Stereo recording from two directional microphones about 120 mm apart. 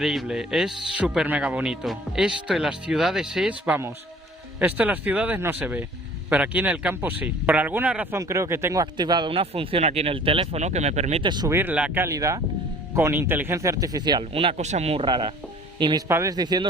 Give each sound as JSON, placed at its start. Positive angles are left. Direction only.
{"t": 0.0, "sound": "a man's voice", "side_deg": 0}
{"t": 8.1, "sound": "speech", "side_deg": -25}
{"t": 11.2, "sound": "speech", "side_deg": -40}
{"t": 11.4, "sound": "speech", "side_deg": -20}
{"t": 12.0, "sound": "speech", "side_deg": -25}
{"t": 14.3, "sound": "speech", "side_deg": -65}
{"t": 15.0, "sound": "speech", "side_deg": -40}
{"t": 16.0, "sound": "speech", "side_deg": -20}
{"t": 16.3, "sound": "speech", "side_deg": -35}